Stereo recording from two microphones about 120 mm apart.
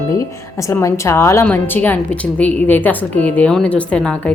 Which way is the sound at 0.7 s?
25° left (ahead or behind).